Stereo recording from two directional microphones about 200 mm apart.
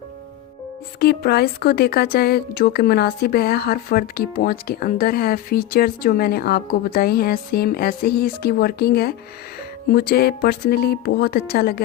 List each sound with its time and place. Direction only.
0.9 s speech: 50° left (ahead or behind)